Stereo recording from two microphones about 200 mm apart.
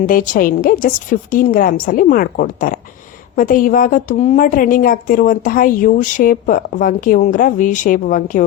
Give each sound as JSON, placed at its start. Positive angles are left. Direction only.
{"t": 0.0, "sound": "a woman's voice", "side_deg": 45}